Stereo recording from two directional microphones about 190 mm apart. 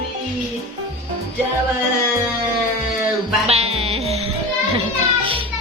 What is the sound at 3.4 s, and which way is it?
Music, 35° right (ahead or behind).